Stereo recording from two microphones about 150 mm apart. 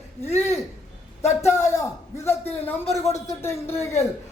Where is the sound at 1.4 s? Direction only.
20° left (ahead or behind).